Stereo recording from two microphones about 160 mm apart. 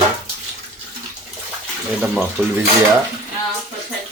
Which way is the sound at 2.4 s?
15° right (ahead or behind).